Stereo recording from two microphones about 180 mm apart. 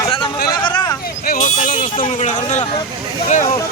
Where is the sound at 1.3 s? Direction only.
50° left (ahead or behind).